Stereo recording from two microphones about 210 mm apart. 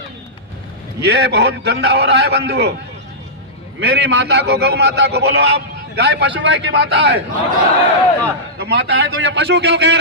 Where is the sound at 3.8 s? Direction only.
55° right (ahead or behind).